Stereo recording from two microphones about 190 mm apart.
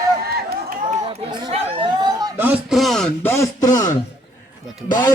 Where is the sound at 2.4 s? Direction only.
5° right (ahead or behind); by 3.9 s 20° left (ahead or behind).